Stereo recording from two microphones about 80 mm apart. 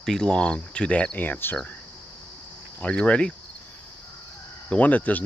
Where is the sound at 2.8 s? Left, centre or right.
Centre.